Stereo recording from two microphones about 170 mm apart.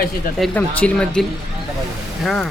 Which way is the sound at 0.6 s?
5° left (ahead or behind).